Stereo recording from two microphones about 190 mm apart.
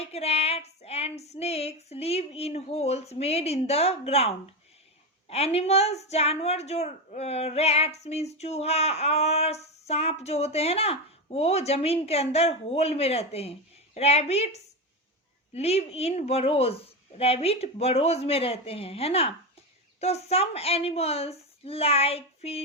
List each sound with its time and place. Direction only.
0.0 s a woman's voice: 35° left (ahead or behind)